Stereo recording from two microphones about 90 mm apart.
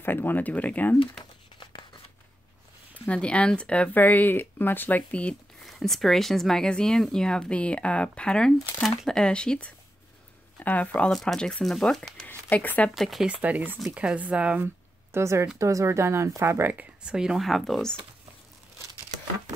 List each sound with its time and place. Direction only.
0.0 s speech: 20° left (ahead or behind)
1.6 s a sound: 60° left (ahead or behind)
3.1 s speech: 15° left (ahead or behind)
5.6 s speech: centre (ahead or behind)
11.1 s speech: 5° left (ahead or behind)
12.3 s speech: 20° left (ahead or behind)
12.9 s speech: centre (ahead or behind)
13.3 s speech: 15° right (ahead or behind)
15.1 s speech: 30° right (ahead or behind)
17.0 s speech: 10° right (ahead or behind)